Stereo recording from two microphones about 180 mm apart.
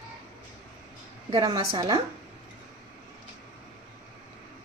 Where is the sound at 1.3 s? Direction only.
25° right (ahead or behind).